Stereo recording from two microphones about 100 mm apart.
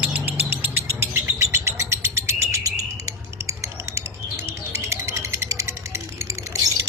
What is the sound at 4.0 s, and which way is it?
Bird, 25° right (ahead or behind).